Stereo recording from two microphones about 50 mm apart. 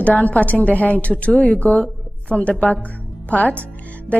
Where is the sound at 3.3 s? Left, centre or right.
Left.